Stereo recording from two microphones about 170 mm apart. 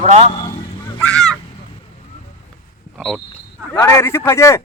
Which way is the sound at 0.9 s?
5° left (ahead or behind).